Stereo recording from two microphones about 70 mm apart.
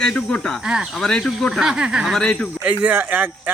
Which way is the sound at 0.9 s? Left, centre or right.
Centre.